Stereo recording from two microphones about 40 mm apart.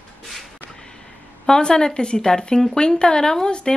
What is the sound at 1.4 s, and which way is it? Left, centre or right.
Speech, centre.